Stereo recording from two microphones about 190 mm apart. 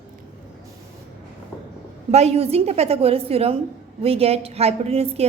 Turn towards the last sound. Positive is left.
turn(degrees=-35)  # may be behind; listen again after turning